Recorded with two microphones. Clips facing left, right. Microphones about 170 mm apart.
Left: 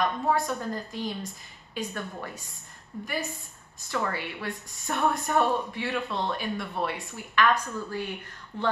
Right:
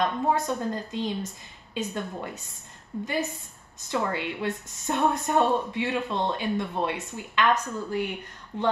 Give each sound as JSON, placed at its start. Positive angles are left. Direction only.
{"t": 0.0, "sound": "a woman's voice", "side_deg": -20}